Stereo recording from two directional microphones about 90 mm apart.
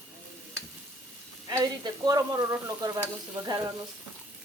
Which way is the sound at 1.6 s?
45° right (ahead or behind).